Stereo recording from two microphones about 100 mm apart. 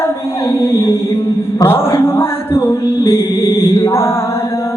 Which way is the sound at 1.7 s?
25° left (ahead or behind).